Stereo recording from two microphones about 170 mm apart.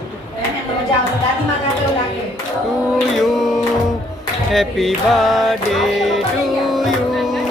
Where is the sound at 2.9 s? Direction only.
Centre (ahead or behind).